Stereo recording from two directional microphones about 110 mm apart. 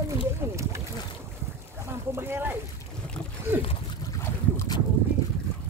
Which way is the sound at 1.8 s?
20° right (ahead or behind).